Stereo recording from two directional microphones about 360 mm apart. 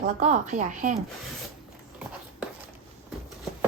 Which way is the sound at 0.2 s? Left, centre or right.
Centre.